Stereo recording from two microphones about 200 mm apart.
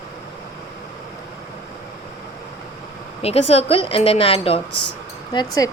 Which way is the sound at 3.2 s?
30° left (ahead or behind).